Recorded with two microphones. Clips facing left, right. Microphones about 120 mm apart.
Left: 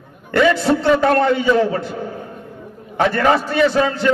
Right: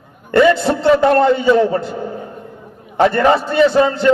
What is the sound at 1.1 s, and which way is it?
Speech, 30° right (ahead or behind).